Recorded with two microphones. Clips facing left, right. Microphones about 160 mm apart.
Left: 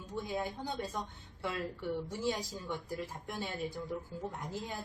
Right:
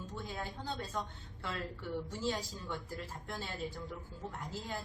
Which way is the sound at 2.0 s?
15° left (ahead or behind).